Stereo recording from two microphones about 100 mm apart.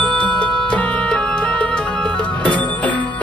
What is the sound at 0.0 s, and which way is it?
Music, 10° left (ahead or behind).